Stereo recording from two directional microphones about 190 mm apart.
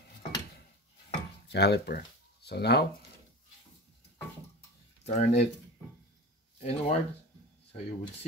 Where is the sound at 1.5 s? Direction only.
60° left (ahead or behind).